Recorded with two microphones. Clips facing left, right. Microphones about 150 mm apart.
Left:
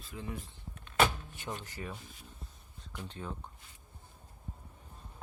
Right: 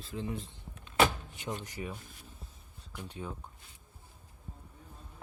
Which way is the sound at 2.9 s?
10° right (ahead or behind).